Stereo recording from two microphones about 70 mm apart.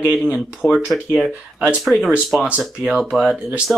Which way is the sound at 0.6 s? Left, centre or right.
Centre.